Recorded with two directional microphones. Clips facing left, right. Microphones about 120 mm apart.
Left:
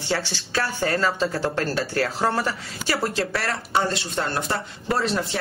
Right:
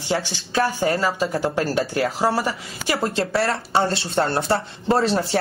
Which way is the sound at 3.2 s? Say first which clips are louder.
Right 4 dB; 30° right (ahead or behind).